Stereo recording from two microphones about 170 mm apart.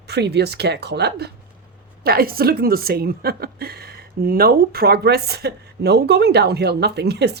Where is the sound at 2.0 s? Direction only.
60° right (ahead or behind).